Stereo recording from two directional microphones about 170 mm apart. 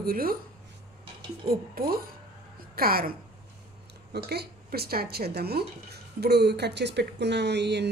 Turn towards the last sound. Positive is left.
turn(degrees=-85)